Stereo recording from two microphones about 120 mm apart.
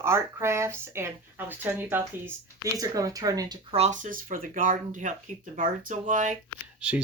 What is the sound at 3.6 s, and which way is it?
Speech, 60° right (ahead or behind).